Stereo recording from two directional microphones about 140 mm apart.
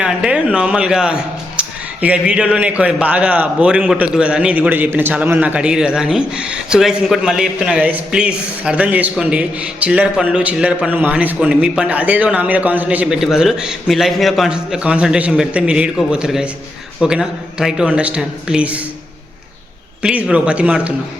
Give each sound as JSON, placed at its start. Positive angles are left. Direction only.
{"t": 0.0, "sound": "a man's voice", "side_deg": -5}
{"t": 20.0, "sound": "speech", "side_deg": -5}